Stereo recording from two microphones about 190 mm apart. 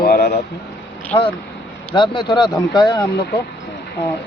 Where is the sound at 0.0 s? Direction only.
50° left (ahead or behind).